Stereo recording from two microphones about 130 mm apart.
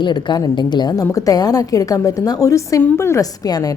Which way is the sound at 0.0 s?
35° left (ahead or behind).